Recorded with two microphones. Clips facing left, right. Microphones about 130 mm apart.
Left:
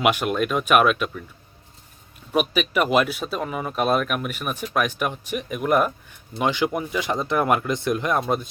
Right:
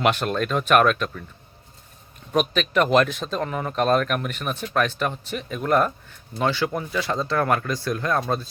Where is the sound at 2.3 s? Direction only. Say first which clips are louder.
Even; 10° left (ahead or behind).